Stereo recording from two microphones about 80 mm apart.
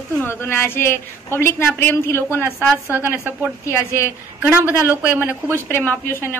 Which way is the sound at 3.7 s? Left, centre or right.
Left.